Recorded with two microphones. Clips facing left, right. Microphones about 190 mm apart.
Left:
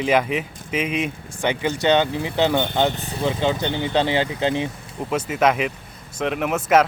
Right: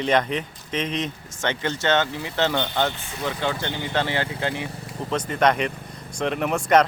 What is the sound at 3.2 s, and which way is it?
Speech, 20° left (ahead or behind).